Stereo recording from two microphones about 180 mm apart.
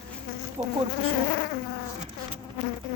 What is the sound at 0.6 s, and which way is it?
Insect, 30° right (ahead or behind).